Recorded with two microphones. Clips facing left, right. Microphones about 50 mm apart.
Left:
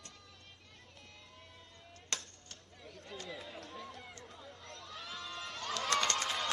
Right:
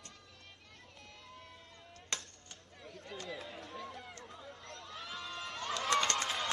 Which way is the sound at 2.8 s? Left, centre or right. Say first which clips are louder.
Right 2 dB; centre.